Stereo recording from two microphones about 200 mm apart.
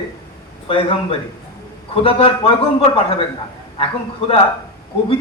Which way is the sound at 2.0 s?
30° left (ahead or behind).